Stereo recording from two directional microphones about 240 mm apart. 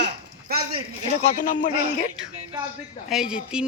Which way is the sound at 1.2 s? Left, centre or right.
Left.